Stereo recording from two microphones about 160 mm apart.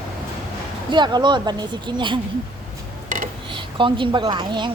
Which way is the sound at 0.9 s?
30° right (ahead or behind).